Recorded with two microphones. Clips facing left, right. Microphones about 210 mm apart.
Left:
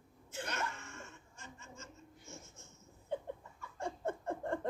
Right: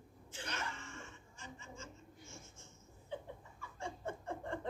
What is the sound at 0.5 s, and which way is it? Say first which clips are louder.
Chuckle: left 3 dB; 45° left (ahead or behind).